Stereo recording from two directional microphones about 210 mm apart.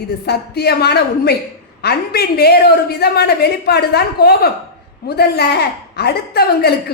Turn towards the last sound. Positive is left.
turn(degrees=50)  # may be behind; listen again after turning